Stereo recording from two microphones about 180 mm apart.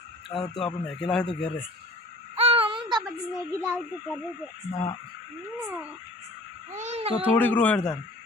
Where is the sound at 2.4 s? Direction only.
30° right (ahead or behind).